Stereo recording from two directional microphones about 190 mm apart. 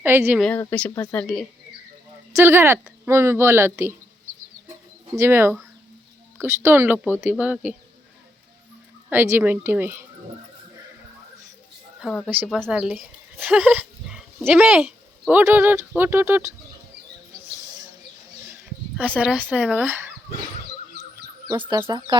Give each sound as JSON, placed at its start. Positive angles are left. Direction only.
{"t": 0.0, "sound": "a woman's voice", "side_deg": -10}
{"t": 0.3, "sound": "speech", "side_deg": 5}
{"t": 2.3, "sound": "a woman's voice", "side_deg": -10}
{"t": 5.1, "sound": "a woman's voice", "side_deg": -10}
{"t": 9.0, "sound": "a woman's voice", "side_deg": -10}
{"t": 11.9, "sound": "a woman's voice", "side_deg": 0}
{"t": 18.9, "sound": "a woman's voice", "side_deg": -10}
{"t": 21.8, "sound": "speech", "side_deg": -25}